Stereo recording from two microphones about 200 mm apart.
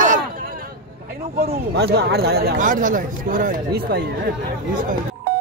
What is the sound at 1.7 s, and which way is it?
Speech, 55° right (ahead or behind).